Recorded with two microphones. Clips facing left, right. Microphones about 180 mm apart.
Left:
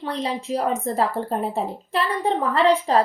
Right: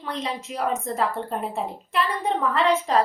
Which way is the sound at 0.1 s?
35° left (ahead or behind).